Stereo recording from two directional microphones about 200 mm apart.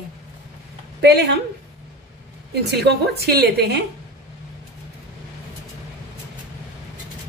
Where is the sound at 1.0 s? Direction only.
55° right (ahead or behind).